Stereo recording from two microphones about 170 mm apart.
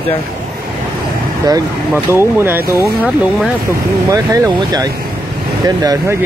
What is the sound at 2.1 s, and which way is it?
Speech, 15° right (ahead or behind).